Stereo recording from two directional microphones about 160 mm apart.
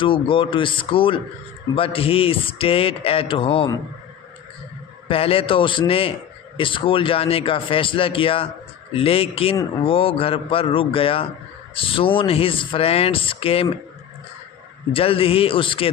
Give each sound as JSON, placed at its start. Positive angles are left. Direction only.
{"t": 0.0, "sound": "speech", "side_deg": 30}
{"t": 5.0, "sound": "speech", "side_deg": 35}
{"t": 14.9, "sound": "speech", "side_deg": 35}